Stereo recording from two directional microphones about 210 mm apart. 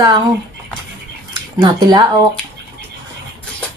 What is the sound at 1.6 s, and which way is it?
Speech, 20° right (ahead or behind).